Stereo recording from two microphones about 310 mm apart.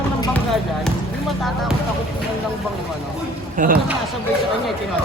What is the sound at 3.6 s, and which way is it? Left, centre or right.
Speech, right.